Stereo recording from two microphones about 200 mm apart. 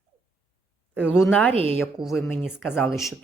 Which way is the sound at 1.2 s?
10° left (ahead or behind).